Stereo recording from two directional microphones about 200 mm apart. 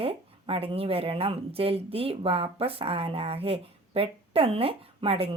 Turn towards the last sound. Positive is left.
turn(degrees=-30)  # may be behind; listen again after turning